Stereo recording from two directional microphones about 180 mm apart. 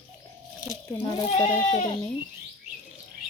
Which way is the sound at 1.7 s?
30° left (ahead or behind).